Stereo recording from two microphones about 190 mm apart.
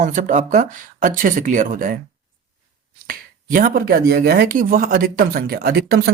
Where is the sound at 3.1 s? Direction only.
50° right (ahead or behind).